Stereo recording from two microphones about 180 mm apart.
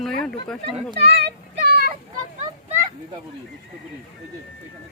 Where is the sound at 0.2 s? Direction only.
5° left (ahead or behind).